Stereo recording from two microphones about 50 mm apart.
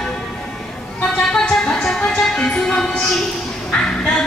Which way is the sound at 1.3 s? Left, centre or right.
Left.